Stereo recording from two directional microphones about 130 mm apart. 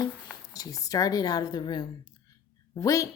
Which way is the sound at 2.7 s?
25° left (ahead or behind).